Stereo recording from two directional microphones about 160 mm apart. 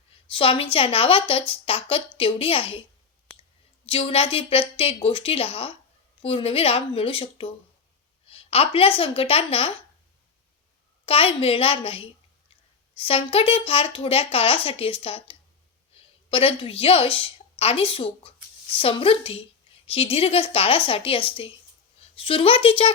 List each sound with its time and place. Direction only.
0.3 s a woman's voice: 35° left (ahead or behind)
3.8 s a woman's voice: 35° left (ahead or behind)
11.0 s a woman's voice: 35° left (ahead or behind)